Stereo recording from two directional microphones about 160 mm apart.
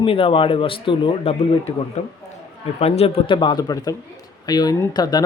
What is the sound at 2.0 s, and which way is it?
A man's voice, 45° left (ahead or behind).